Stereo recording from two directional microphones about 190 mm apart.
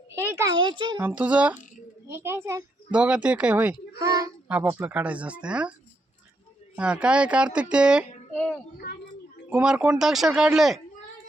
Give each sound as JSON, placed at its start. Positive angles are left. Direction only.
{"t": 0.2, "sound": "a sound", "side_deg": -10}
{"t": 0.5, "sound": "a child's voice", "side_deg": -25}
{"t": 1.0, "sound": "speech", "side_deg": -5}
{"t": 3.9, "sound": "a child's voice", "side_deg": -20}
{"t": 4.9, "sound": "speech", "side_deg": -5}
{"t": 6.7, "sound": "speech", "side_deg": -5}
{"t": 9.5, "sound": "speech", "side_deg": -5}